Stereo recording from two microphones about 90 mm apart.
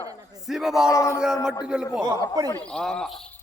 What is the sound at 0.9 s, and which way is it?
Speech, 35° left (ahead or behind).